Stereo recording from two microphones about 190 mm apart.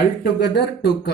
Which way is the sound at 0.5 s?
60° left (ahead or behind).